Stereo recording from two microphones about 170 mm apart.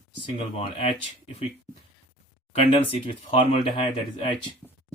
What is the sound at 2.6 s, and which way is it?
Speech, 30° left (ahead or behind).